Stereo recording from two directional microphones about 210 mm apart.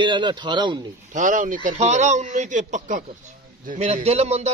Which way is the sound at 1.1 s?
35° right (ahead or behind).